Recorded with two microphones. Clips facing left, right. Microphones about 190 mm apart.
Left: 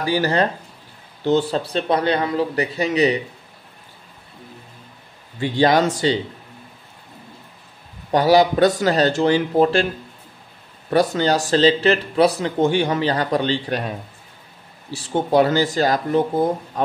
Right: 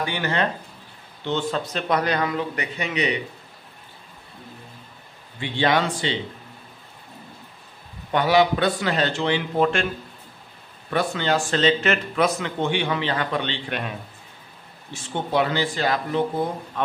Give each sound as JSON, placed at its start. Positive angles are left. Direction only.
{"t": 0.0, "sound": "speech", "side_deg": 35}
{"t": 5.4, "sound": "speech", "side_deg": 40}
{"t": 8.1, "sound": "speech", "side_deg": 40}
{"t": 10.9, "sound": "a man's voice", "side_deg": 40}